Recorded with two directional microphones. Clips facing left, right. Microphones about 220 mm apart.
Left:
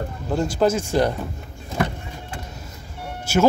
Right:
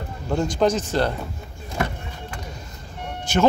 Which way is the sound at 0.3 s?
5° left (ahead or behind).